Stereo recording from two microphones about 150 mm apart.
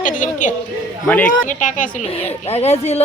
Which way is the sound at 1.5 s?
60° left (ahead or behind).